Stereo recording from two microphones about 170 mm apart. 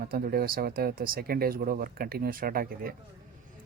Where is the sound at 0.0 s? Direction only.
60° right (ahead or behind).